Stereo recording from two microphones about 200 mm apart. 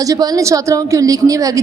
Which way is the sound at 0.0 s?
20° right (ahead or behind).